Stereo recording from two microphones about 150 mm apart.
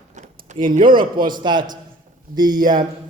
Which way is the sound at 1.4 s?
30° right (ahead or behind).